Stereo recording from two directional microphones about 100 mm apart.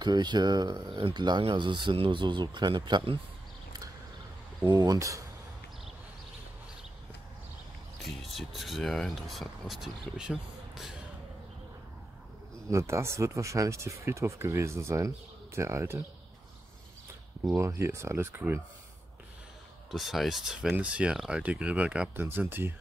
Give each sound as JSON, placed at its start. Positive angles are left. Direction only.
{"t": 0.0, "sound": "speech", "side_deg": -45}
{"t": 4.6, "sound": "speech", "side_deg": -40}
{"t": 8.2, "sound": "speech", "side_deg": 0}
{"t": 12.7, "sound": "speech", "side_deg": -30}
{"t": 17.6, "sound": "speech", "side_deg": -30}
{"t": 19.9, "sound": "speech", "side_deg": 0}
{"t": 22.1, "sound": "speech", "side_deg": -20}